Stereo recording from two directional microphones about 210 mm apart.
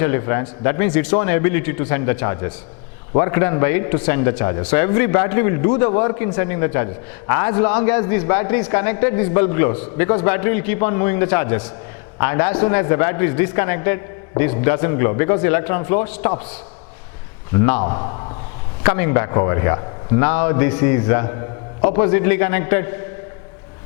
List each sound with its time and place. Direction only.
0.0 s speech: 15° left (ahead or behind)
17.5 s a man's voice: 15° left (ahead or behind)